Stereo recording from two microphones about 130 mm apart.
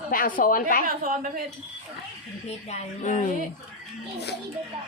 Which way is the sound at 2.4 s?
60° left (ahead or behind).